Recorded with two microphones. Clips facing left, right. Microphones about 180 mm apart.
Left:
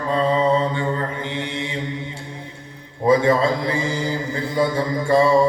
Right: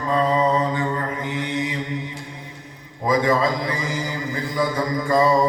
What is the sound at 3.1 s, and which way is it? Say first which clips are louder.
A man's voice: left 3 dB; 30° left (ahead or behind).